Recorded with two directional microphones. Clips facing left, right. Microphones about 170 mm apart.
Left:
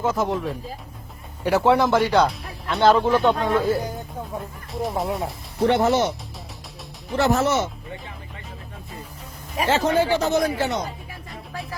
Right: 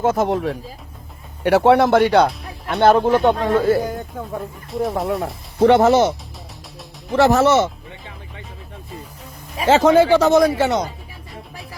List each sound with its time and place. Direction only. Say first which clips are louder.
0.0 s speech: right 5 dB; 55° right (ahead or behind)
1.5 s speech: right 5 dB; 65° right (ahead or behind)
2.8 s speech: right 3 dB; 55° right (ahead or behind)
4.7 s speech: right 4 dB; centre (ahead or behind)
5.5 s speech: right 6 dB; 90° right
7.2 s speech: right 6 dB; 85° right
9.6 s speech: right 8 dB; 90° right